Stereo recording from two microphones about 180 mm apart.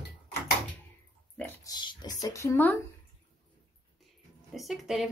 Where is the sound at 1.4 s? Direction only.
25° left (ahead or behind).